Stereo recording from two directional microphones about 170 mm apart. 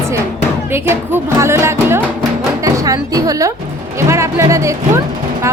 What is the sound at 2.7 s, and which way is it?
Speech, 20° right (ahead or behind).